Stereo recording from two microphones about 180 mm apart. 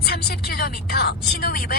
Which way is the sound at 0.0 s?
60° left (ahead or behind).